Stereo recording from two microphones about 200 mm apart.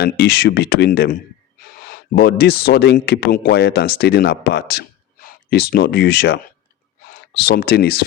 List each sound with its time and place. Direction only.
0.0 s speech: 55° left (ahead or behind)